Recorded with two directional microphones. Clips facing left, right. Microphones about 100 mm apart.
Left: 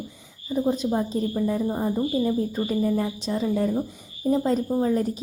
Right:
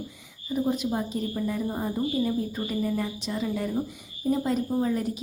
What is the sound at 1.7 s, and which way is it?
Speech, 10° left (ahead or behind).